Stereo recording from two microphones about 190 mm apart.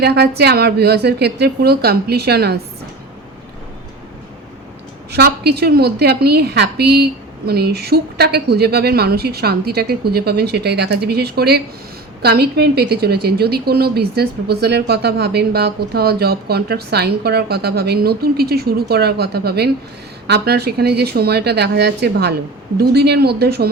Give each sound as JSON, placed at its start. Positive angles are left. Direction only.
{"t": 0.0, "sound": "a woman's voice", "side_deg": -60}
{"t": 5.1, "sound": "a woman's voice", "side_deg": -60}